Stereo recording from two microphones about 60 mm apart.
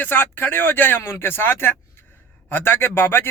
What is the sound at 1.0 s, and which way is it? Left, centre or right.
Speech, left.